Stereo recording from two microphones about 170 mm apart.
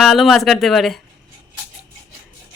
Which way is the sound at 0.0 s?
Centre (ahead or behind).